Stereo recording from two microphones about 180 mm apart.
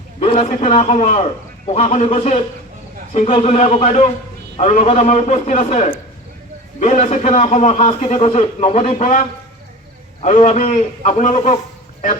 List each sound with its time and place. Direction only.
0.2 s a man's voice: 35° left (ahead or behind)
10.2 s a man's voice: 40° left (ahead or behind)